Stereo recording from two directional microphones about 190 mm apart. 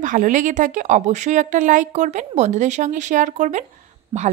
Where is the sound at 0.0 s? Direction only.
45° right (ahead or behind).